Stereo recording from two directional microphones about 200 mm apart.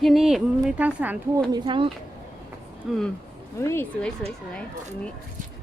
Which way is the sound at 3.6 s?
15° left (ahead or behind).